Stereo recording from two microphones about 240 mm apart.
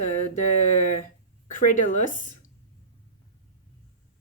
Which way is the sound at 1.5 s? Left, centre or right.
Left.